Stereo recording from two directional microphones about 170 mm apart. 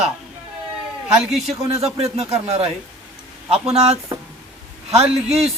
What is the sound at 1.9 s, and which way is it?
A man's voice, 35° right (ahead or behind).